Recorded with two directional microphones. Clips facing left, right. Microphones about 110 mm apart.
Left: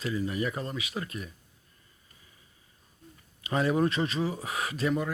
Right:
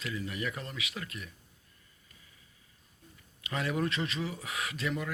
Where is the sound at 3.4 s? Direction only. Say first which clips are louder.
Left 7 dB; 35° left (ahead or behind).